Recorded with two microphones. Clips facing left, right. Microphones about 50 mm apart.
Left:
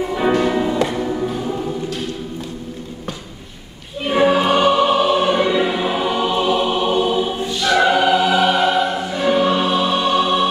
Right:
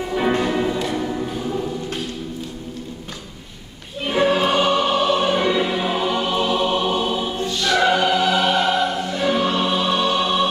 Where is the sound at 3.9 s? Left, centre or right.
Centre.